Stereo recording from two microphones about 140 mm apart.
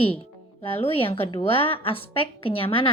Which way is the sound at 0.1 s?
40° left (ahead or behind).